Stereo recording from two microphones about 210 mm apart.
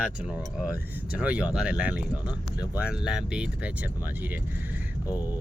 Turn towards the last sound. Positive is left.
turn(degrees=-5)  # may be behind; listen again after turning